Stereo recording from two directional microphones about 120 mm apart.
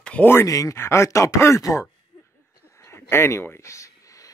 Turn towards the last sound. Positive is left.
turn(degrees=25)  # may be behind; listen again after turning